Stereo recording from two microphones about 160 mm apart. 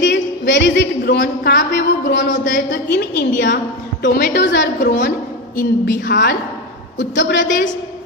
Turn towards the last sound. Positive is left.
turn(degrees=55)  # may be behind; listen again after turning